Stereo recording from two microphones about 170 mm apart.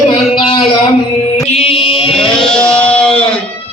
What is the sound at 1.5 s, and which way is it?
Chant, 35° left (ahead or behind).